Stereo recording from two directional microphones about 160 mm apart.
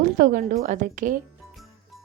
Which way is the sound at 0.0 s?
60° right (ahead or behind).